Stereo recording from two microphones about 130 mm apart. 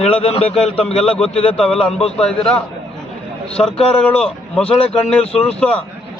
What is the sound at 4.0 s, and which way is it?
Speech, 5° left (ahead or behind).